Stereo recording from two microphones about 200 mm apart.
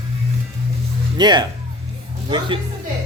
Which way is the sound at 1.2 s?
20° right (ahead or behind).